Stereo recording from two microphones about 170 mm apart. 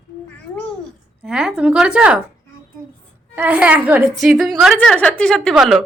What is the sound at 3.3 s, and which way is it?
A woman's voice, 10° right (ahead or behind).